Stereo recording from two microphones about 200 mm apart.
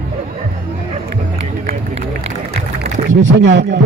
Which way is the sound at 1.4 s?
30° right (ahead or behind).